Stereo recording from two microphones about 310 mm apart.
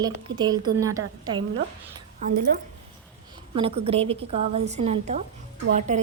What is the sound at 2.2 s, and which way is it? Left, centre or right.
Speech, right.